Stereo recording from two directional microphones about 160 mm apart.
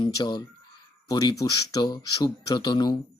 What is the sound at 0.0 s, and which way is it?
Speech, 25° left (ahead or behind).